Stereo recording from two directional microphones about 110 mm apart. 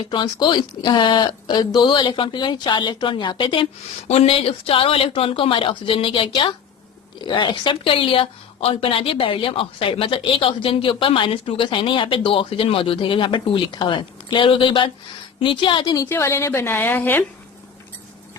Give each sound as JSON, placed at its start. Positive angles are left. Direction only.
{"t": 0.1, "sound": "speech", "side_deg": 45}
{"t": 4.1, "sound": "speech", "side_deg": 65}
{"t": 16.0, "sound": "a woman's voice", "side_deg": 25}